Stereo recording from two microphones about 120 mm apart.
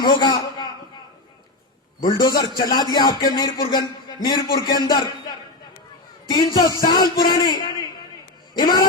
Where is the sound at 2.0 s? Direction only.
35° left (ahead or behind).